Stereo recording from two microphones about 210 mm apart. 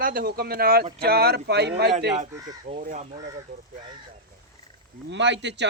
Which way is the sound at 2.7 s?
35° right (ahead or behind).